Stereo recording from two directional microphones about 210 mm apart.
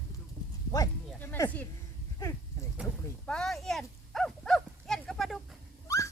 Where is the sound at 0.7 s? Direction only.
10° left (ahead or behind).